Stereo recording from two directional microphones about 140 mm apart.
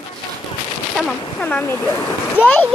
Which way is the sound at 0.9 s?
5° left (ahead or behind).